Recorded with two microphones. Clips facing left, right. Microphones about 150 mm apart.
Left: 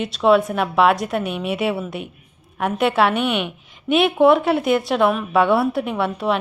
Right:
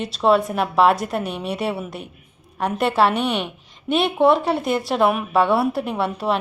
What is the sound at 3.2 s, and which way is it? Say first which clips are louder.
Speech: left 1 dB; 35° right (ahead or behind).